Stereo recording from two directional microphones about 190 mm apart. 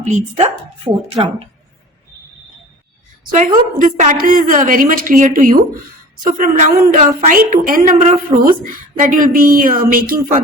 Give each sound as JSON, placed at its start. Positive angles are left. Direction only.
{"t": 0.1, "sound": "a woman's voice", "side_deg": -40}
{"t": 0.4, "sound": "speech", "side_deg": -25}
{"t": 3.3, "sound": "a woman's voice", "side_deg": -40}